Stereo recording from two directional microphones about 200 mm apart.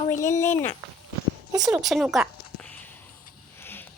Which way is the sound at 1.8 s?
Centre (ahead or behind).